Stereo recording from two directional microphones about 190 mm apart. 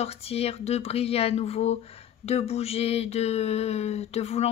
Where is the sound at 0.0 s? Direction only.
30° left (ahead or behind).